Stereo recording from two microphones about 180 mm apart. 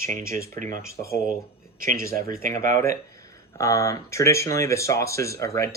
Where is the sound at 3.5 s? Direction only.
15° left (ahead or behind).